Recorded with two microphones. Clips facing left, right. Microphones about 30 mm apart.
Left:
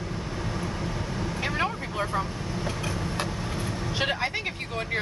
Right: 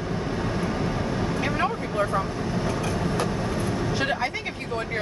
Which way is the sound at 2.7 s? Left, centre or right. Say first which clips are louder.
Right 2 dB; centre.